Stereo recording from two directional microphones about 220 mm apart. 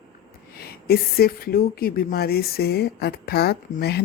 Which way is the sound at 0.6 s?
45° left (ahead or behind).